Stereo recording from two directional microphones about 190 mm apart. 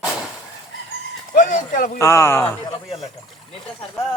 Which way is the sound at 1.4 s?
45° left (ahead or behind).